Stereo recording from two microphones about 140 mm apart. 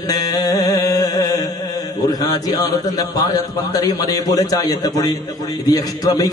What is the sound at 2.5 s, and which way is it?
A man's voice, 30° left (ahead or behind).